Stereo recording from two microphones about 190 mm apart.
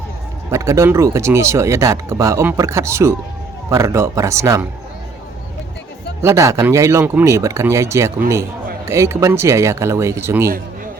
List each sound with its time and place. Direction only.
0.5 s speech: 15° right (ahead or behind)
6.2 s speech: 15° right (ahead or behind)